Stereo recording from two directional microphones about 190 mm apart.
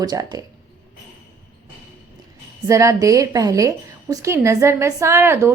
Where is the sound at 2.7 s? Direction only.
15° right (ahead or behind).